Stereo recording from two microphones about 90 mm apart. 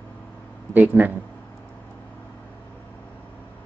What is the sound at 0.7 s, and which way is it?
Speech, 20° right (ahead or behind).